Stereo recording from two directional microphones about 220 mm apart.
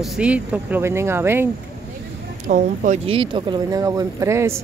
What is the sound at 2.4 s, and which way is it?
Speech, 35° right (ahead or behind).